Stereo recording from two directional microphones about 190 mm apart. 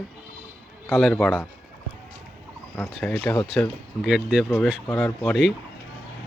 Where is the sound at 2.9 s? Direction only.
5° left (ahead or behind).